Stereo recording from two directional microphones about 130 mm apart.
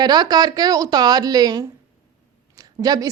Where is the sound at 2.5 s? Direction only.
30° right (ahead or behind).